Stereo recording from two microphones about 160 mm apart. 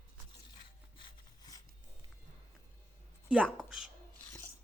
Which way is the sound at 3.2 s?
5° right (ahead or behind).